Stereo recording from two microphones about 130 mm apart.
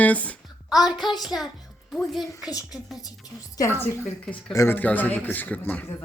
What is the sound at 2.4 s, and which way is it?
A woman's voice, 25° left (ahead or behind).